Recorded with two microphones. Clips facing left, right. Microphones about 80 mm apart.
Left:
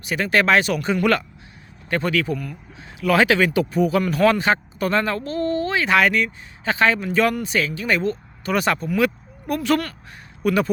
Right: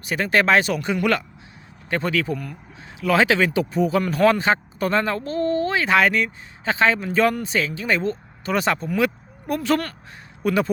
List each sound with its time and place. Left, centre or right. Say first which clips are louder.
0.0 s speech: even; right
0.8 s speech: left 2 dB; centre
1.9 s speech: left 1 dB; right
3.0 s speech: left 1 dB; right
9.0 s a sound: left 1 dB; right
9.6 s speech: left 1 dB; right